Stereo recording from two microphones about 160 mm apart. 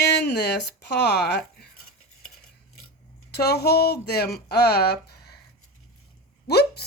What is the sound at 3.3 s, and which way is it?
Speech, 90° left.